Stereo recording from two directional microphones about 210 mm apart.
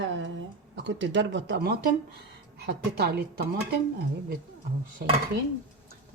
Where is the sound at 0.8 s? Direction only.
60° right (ahead or behind).